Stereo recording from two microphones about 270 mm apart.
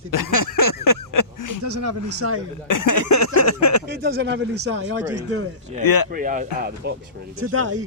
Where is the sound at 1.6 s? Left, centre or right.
Right.